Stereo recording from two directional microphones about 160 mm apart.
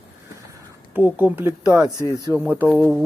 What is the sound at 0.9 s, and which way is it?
Speech, 10° right (ahead or behind).